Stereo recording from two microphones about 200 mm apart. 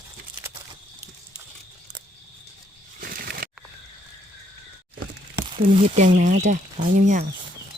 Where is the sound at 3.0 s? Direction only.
50° right (ahead or behind).